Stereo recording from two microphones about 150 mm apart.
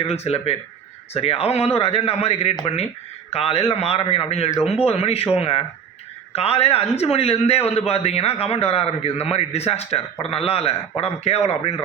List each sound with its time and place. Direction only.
0.1 s a man's voice: 40° left (ahead or behind)